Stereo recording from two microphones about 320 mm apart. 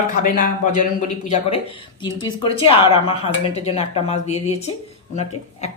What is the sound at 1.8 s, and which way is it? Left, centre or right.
A woman's voice, centre.